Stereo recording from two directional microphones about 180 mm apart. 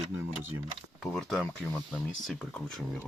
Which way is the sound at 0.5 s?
15° right (ahead or behind).